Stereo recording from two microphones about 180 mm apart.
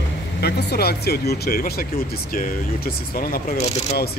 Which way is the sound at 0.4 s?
65° left (ahead or behind).